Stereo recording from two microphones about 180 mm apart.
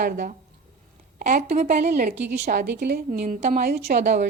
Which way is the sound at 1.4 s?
40° right (ahead or behind).